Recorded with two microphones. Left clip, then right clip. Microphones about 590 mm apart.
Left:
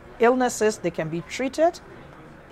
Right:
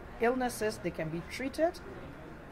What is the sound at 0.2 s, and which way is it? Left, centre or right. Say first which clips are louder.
Speech: left 11 dB; left.